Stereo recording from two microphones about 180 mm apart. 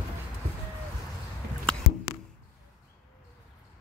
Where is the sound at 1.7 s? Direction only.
5° left (ahead or behind).